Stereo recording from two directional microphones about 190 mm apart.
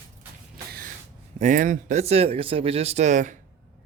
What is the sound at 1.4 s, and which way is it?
Speech, 40° right (ahead or behind).